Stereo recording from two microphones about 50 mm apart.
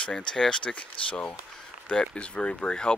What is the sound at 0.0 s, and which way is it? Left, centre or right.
Speech, centre.